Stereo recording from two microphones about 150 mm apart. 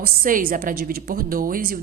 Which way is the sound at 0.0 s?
65° right (ahead or behind).